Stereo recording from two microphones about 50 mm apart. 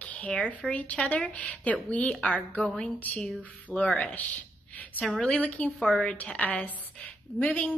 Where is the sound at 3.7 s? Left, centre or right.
Left.